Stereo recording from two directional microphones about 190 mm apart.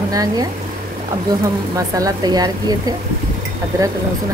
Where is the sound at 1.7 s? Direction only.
15° right (ahead or behind).